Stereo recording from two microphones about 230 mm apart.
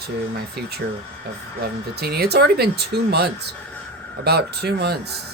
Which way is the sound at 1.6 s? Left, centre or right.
Right.